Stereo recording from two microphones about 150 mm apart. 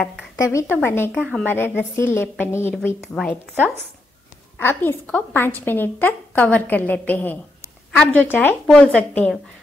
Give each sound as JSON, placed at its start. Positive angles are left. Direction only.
{"t": 0.4, "sound": "a woman's voice", "side_deg": 20}
{"t": 3.0, "sound": "a woman's voice", "side_deg": 5}
{"t": 3.5, "sound": "speech", "side_deg": -10}
{"t": 4.6, "sound": "a woman's voice", "side_deg": 15}